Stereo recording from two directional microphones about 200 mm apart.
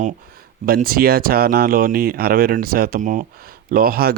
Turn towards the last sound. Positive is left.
turn(degrees=-50)  # may be behind; listen again after turning